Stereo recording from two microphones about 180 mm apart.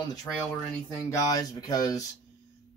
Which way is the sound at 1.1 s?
20° left (ahead or behind).